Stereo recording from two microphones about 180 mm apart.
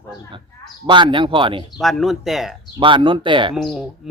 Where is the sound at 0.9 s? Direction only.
25° right (ahead or behind).